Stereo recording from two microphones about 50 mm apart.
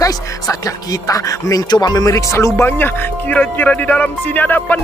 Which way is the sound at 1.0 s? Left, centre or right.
Left.